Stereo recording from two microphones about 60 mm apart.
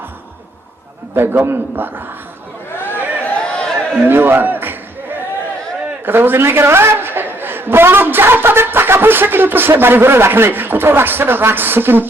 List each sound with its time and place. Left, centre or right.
1.1 s a man's voice: right
2.8 s a sound: left
4.0 s a man's voice: right
6.1 s a man's voice: right